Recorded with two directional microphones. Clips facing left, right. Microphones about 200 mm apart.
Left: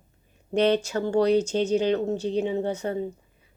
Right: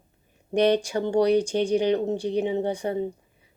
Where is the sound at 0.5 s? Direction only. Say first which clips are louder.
Right 1 dB; 15° right (ahead or behind).